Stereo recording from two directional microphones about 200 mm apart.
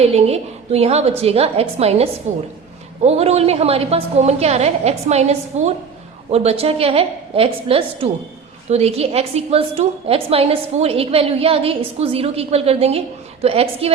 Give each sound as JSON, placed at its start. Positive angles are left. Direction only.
{"t": 0.0, "sound": "a woman's voice", "side_deg": -30}